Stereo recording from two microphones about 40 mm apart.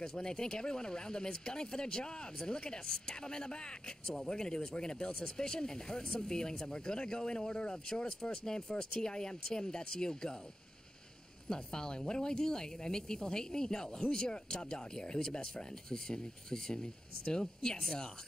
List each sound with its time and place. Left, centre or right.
0.0 s speech: centre
11.4 s speech: centre